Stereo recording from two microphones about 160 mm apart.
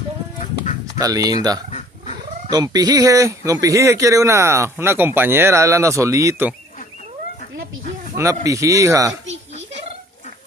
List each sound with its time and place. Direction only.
0.9 s speech: 20° right (ahead or behind)
8.2 s speech: 20° right (ahead or behind)